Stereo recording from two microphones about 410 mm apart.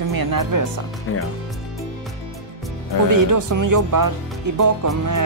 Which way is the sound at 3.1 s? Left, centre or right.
Right.